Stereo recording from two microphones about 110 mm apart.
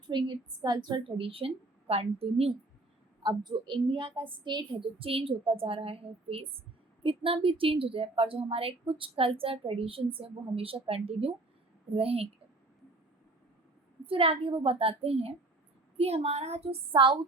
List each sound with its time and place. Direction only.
0.1 s a woman's voice: 45° right (ahead or behind); by 2.5 s 65° right (ahead or behind)
3.2 s speech: 40° right (ahead or behind); by 12.3 s 65° right (ahead or behind)
14.0 s speech: 55° right (ahead or behind); by 17.0 s 70° right (ahead or behind)